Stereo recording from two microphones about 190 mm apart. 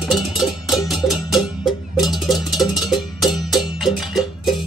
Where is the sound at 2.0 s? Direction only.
Centre (ahead or behind).